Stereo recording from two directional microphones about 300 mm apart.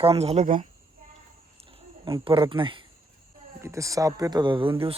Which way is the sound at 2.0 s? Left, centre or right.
Centre.